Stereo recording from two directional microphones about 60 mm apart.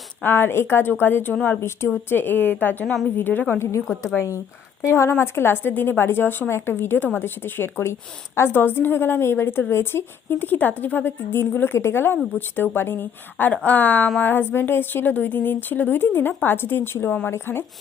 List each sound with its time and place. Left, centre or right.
0.2 s a woman's voice: left
2.8 s a woman's voice: centre
3.2 s a woman's voice: left
3.6 s a woman's voice: left
4.9 s a woman's voice: left
13.5 s a woman's voice: left